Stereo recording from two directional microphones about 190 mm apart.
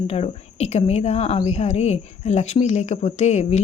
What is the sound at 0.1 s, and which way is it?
Speech, 35° left (ahead or behind).